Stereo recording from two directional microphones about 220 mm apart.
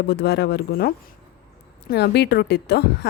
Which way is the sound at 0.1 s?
45° left (ahead or behind).